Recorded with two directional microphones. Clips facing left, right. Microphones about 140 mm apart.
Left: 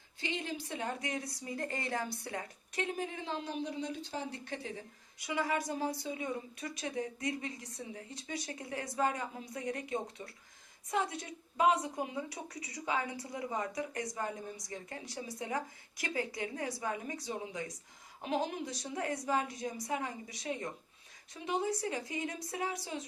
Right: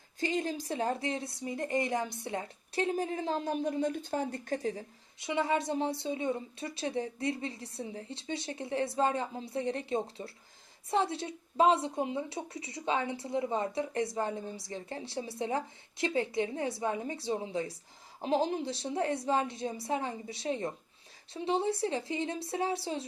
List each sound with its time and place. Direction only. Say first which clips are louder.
0.2 s a woman's voice: right 6 dB; 40° right (ahead or behind)
5.2 s a woman's voice: right 4 dB; 25° right (ahead or behind)